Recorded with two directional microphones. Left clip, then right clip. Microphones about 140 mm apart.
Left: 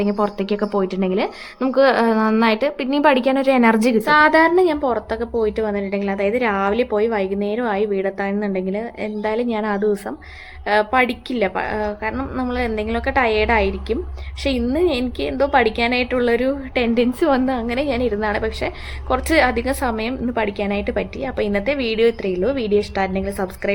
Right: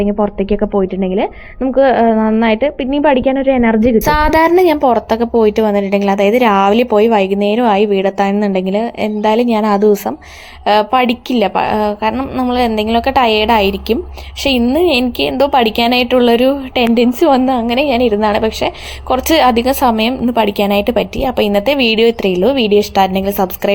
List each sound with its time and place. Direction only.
0.0 s a woman's voice: 5° right (ahead or behind)
4.0 s a woman's voice: 40° right (ahead or behind)